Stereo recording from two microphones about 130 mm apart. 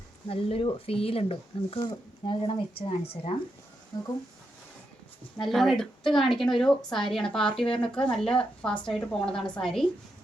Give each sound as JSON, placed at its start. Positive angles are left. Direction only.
{"t": 0.3, "sound": "speech", "side_deg": 45}
{"t": 5.4, "sound": "a woman's voice", "side_deg": 0}